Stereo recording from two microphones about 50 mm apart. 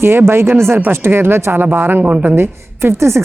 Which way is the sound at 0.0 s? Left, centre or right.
Right.